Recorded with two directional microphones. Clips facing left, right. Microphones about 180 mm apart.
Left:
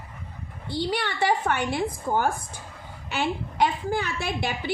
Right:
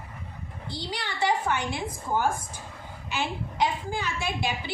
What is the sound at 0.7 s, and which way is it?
A woman's voice, 60° left (ahead or behind).